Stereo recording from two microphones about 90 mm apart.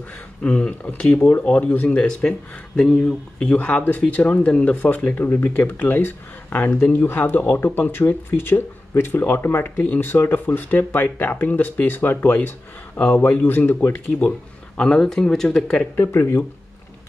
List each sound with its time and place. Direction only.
0.4 s speech: 15° left (ahead or behind)
16.0 s speech: 25° left (ahead or behind)